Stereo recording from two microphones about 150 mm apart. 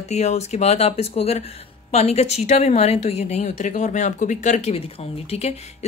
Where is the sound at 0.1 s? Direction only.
50° left (ahead or behind).